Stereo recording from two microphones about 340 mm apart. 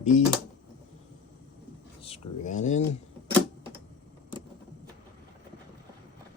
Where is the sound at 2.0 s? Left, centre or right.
Centre.